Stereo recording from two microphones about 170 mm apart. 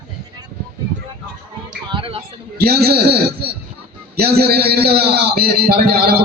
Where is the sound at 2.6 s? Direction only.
65° right (ahead or behind).